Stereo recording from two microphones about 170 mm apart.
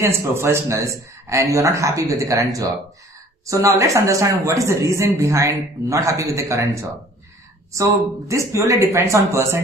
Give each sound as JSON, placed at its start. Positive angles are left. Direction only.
{"t": 0.0, "sound": "speech", "side_deg": -15}